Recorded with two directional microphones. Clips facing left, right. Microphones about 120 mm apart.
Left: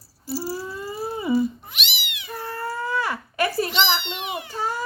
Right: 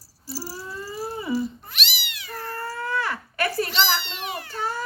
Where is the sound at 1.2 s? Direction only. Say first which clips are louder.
Left 6 dB; 15° left (ahead or behind).